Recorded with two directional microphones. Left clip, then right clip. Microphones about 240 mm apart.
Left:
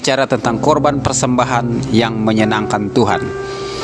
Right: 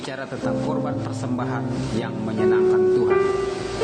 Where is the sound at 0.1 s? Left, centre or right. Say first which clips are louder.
Left 13 dB; left.